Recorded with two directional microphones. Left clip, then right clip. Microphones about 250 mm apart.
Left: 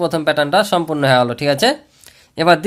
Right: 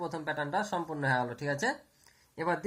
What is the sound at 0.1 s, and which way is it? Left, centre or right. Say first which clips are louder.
Speech: left 18 dB; left.